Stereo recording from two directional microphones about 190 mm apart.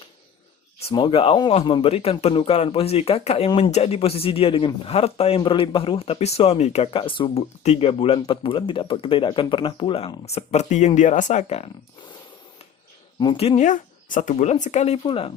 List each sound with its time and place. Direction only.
0.9 s speech: 25° left (ahead or behind)
13.1 s speech: 25° left (ahead or behind)